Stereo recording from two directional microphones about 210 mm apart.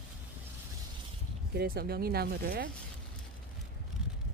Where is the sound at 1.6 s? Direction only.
45° right (ahead or behind).